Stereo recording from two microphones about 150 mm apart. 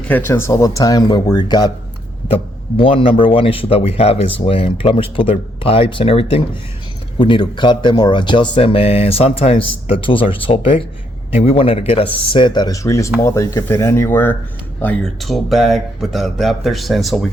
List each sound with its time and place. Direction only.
0.1 s speech: 15° left (ahead or behind)